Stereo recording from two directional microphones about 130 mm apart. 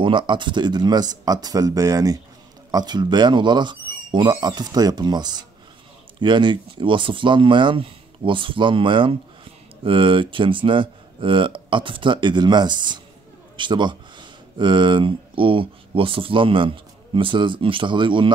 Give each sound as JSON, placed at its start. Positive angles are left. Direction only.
{"t": 0.0, "sound": "speech", "side_deg": -40}